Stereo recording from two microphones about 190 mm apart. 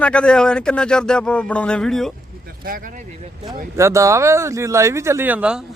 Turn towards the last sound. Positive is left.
turn(degrees=-5)  # may be behind; listen again after turning